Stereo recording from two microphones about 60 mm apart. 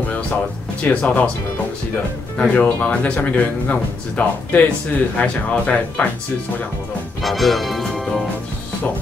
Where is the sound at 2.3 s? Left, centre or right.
Left.